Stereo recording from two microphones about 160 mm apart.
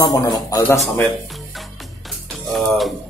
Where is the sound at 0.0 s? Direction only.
20° left (ahead or behind).